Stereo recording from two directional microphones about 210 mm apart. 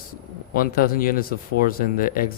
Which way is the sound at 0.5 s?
45° left (ahead or behind).